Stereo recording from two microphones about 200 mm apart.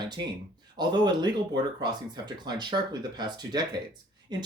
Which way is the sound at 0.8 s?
20° right (ahead or behind).